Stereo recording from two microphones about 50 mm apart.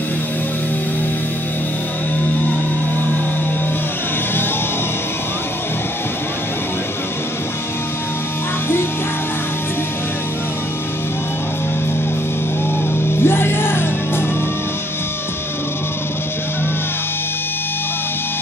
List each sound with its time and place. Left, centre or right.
13.2 s music: left